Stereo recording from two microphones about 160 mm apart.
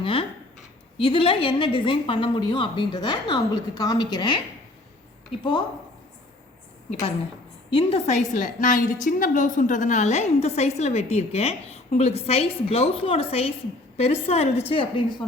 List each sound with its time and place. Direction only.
0.0 s a sound: 35° left (ahead or behind)
0.9 s a woman's voice: 35° left (ahead or behind)
5.4 s a woman's voice: 30° left (ahead or behind)
7.7 s a woman's voice: 35° left (ahead or behind)